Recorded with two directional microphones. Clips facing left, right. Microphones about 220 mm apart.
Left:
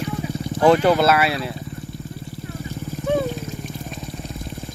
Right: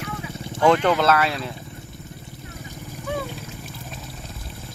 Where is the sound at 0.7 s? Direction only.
10° left (ahead or behind).